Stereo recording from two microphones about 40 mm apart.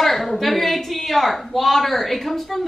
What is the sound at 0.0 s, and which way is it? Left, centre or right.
A woman's voice, centre.